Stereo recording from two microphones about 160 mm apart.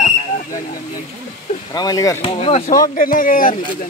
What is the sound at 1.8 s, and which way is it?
Speech, 25° left (ahead or behind).